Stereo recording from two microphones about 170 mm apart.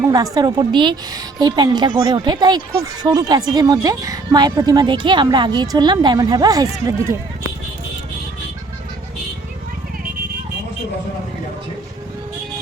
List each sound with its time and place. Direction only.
0.1 s speech: 20° right (ahead or behind)